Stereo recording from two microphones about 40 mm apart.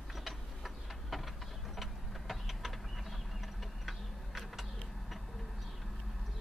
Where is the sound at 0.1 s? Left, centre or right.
Centre.